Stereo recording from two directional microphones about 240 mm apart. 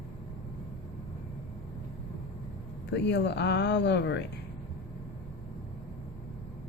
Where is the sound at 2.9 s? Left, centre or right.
Left.